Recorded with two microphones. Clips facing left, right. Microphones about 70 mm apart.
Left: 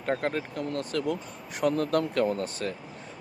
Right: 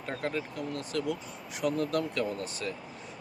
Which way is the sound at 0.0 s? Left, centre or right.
Left.